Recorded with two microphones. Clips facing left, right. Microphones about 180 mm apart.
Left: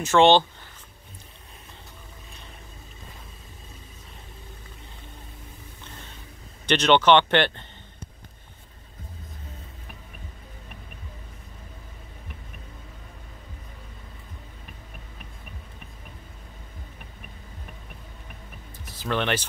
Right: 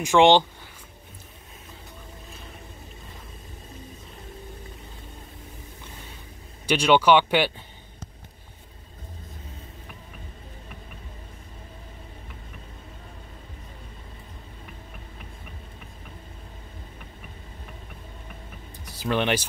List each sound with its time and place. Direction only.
0.0 s speech: 15° right (ahead or behind)
6.6 s speech: 10° right (ahead or behind)
18.9 s speech: 15° right (ahead or behind)